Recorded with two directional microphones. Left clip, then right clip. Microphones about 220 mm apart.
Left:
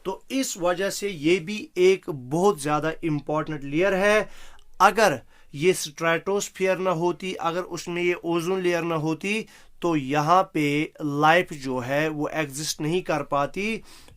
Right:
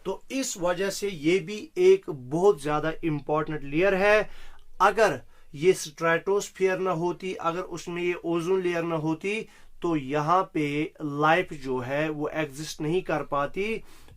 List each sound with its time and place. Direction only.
0.0 s speech: 45° left (ahead or behind)